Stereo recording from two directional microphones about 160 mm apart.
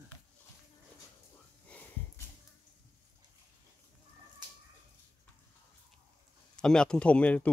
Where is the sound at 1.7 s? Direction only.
10° left (ahead or behind).